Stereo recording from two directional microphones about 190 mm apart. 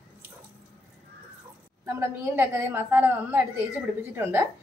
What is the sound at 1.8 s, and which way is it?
A woman's voice, 15° right (ahead or behind).